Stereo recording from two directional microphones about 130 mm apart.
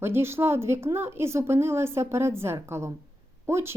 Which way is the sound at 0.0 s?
20° right (ahead or behind).